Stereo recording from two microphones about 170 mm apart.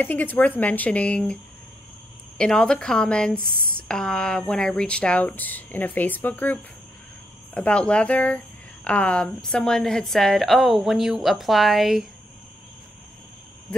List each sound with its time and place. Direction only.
0.0 s a woman's voice: 10° left (ahead or behind)